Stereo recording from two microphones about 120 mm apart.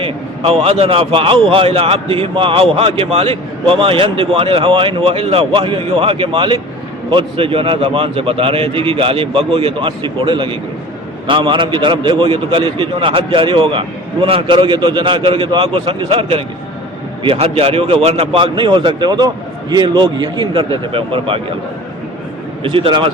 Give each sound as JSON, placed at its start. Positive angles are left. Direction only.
{"t": 0.6, "sound": "a man's voice", "side_deg": -50}
{"t": 22.6, "sound": "a man's voice", "side_deg": -50}